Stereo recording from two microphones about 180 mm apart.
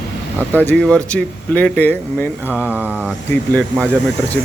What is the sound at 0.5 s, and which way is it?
Speech, 10° left (ahead or behind).